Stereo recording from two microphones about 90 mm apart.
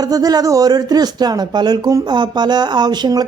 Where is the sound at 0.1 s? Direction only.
45° right (ahead or behind).